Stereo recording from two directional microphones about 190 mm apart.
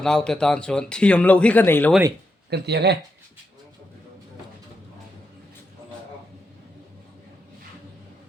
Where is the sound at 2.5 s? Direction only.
60° right (ahead or behind).